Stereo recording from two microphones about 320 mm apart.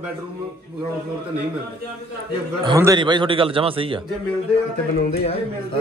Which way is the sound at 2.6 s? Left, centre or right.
Centre.